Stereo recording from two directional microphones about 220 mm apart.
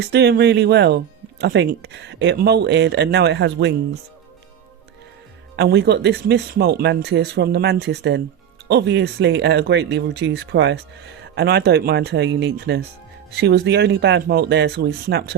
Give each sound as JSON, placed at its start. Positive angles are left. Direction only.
{"t": 0.1, "sound": "speech", "side_deg": -50}
{"t": 5.5, "sound": "speech", "side_deg": -50}